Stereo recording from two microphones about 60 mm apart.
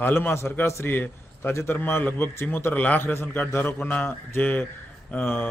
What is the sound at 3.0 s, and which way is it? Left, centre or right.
Speech, left.